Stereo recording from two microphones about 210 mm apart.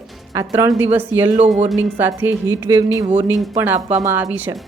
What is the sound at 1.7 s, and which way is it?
Speech, 10° right (ahead or behind).